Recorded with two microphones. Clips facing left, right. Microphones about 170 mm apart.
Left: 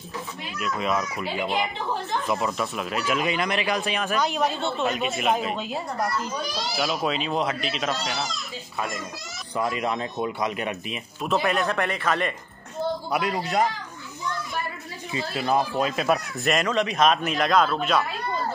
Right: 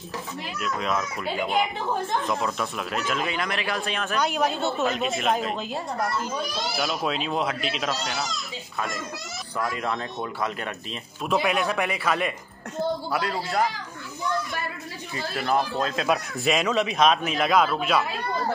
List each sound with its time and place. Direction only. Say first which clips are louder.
0.6 s speech: left 2 dB; centre (ahead or behind)
9.6 s speech: left 2 dB; 15° left (ahead or behind)
11.2 s speech: even; 5° right (ahead or behind)
13.1 s a man's voice: left 2 dB; 20° left (ahead or behind)
15.4 s speech: left 1 dB; 15° left (ahead or behind)
16.0 s speech: left 1 dB; centre (ahead or behind)